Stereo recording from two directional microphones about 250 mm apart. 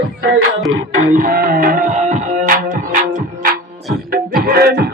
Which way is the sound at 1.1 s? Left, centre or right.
Right.